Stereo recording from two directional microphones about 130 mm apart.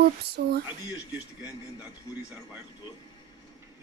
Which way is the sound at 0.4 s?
90° right.